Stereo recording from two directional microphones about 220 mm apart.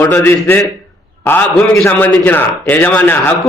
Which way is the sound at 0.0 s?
10° left (ahead or behind).